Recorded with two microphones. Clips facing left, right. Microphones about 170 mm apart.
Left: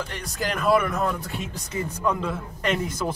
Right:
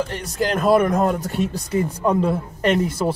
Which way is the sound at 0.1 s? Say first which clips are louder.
Right 7 dB; 35° right (ahead or behind).